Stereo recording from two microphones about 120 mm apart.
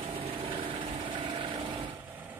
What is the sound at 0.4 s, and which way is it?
Vehicle, 50° right (ahead or behind).